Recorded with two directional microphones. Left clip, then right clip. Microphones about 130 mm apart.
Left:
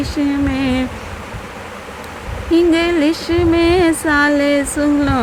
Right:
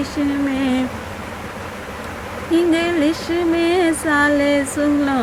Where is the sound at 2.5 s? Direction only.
50° left (ahead or behind).